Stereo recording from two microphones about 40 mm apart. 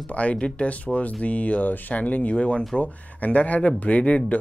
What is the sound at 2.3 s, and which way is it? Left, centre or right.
Speech, left.